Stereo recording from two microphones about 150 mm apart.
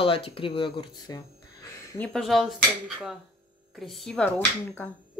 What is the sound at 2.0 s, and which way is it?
Speech, centre (ahead or behind).